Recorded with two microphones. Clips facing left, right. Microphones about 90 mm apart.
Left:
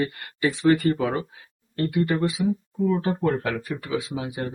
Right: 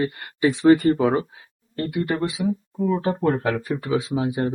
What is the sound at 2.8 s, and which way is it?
Speech, 25° right (ahead or behind).